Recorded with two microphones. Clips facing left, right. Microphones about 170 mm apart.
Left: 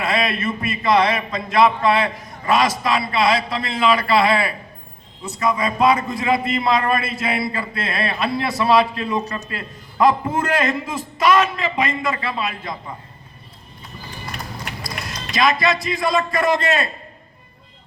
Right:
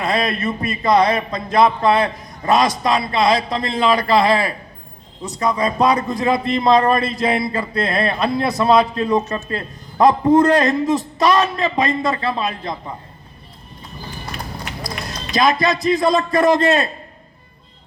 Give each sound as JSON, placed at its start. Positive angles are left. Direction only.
{"t": 0.0, "sound": "a man's voice", "side_deg": -40}
{"t": 14.8, "sound": "a man's voice", "side_deg": -40}